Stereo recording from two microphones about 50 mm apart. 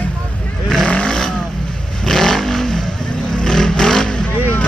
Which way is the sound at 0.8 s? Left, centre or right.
Centre.